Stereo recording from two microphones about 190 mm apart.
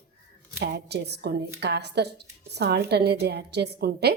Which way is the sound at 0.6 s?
60° right (ahead or behind).